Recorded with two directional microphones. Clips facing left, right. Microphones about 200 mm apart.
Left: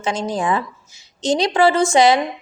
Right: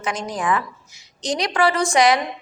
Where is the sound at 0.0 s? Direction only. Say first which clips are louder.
Left 4 dB; 25° left (ahead or behind).